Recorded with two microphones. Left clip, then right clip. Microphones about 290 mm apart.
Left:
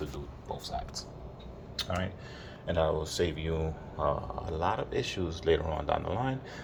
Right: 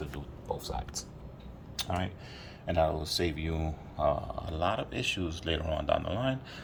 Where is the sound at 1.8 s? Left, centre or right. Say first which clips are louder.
Even; centre.